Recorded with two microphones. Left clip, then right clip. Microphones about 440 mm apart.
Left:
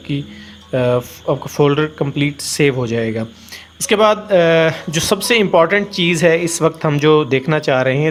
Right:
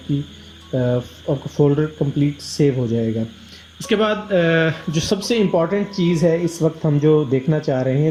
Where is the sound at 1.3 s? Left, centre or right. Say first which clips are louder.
Left 3 dB; left.